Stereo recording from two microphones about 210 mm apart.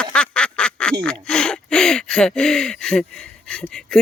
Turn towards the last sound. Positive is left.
turn(degrees=5)  # may be behind; listen again after turning